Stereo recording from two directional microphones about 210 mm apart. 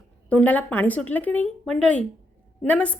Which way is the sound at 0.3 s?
5° left (ahead or behind).